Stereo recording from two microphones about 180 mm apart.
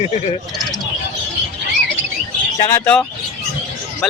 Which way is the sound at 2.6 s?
15° left (ahead or behind).